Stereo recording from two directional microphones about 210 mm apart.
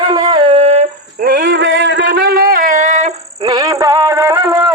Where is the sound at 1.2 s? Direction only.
50° right (ahead or behind); by 3.5 s 35° right (ahead or behind).